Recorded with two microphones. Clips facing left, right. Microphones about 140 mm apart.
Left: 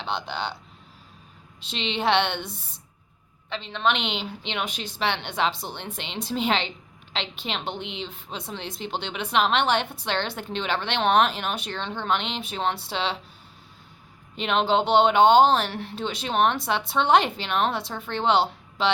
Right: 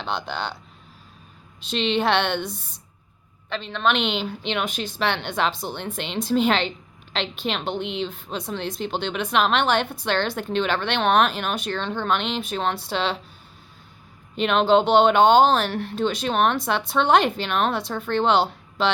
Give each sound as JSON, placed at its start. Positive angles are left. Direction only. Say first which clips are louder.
{"t": 0.3, "sound": "a woman's voice", "louder": "right 1 dB", "side_deg": 20}
{"t": 1.7, "sound": "a woman's voice", "louder": "right 2 dB", "side_deg": 20}
{"t": 3.5, "sound": "a woman's voice", "louder": "right 2 dB", "side_deg": 20}
{"t": 7.8, "sound": "a woman's voice", "louder": "right 7 dB", "side_deg": -60}
{"t": 9.0, "sound": "a woman's voice", "louder": "right 2 dB", "side_deg": 20}
{"t": 14.4, "sound": "a woman's voice", "louder": "right 4 dB", "side_deg": 20}